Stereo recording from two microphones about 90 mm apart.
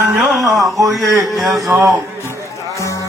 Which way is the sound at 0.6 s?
40° right (ahead or behind).